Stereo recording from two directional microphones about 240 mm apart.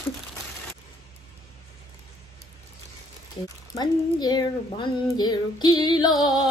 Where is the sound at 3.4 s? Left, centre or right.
Centre.